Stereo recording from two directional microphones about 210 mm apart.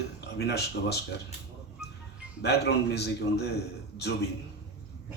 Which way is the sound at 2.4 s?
50° left (ahead or behind).